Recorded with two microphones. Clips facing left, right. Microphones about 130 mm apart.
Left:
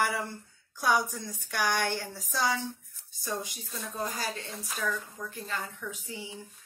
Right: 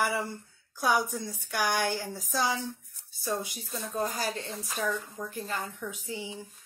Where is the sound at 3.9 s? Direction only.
30° right (ahead or behind).